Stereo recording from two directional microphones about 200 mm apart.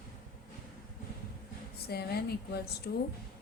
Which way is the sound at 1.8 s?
55° left (ahead or behind).